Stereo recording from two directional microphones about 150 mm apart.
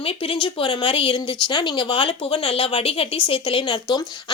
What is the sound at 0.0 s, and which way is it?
Speech, 35° left (ahead or behind).